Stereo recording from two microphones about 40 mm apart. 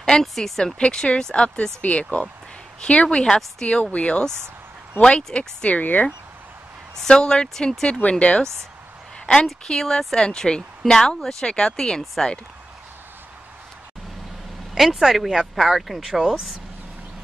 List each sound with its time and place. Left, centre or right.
0.0 s a sound: centre
0.3 s speech: centre
0.7 s speech: left
1.8 s speech: left
5.6 s speech: left
7.0 s speech: centre
8.0 s speech: left
9.8 s speech: centre
14.7 s speech: centre